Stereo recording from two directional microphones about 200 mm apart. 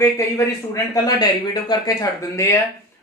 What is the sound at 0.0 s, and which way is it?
Speech, 15° left (ahead or behind).